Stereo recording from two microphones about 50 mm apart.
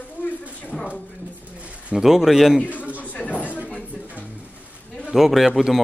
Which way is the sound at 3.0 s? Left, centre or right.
Left.